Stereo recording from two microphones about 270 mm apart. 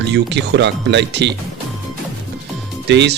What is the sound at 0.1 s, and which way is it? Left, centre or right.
Speech, right.